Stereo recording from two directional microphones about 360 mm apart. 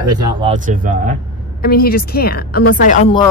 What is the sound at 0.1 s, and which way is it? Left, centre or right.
Speech, centre.